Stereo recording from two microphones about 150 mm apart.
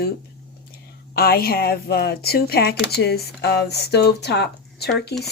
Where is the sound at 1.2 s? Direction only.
90° left.